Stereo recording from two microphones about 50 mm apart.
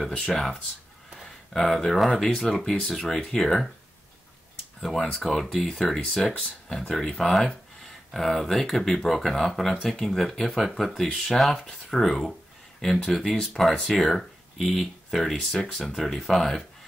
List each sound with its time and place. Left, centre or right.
0.3 s speech: centre
3.1 s speech: centre
3.3 s speech: centre
4.7 s speech: centre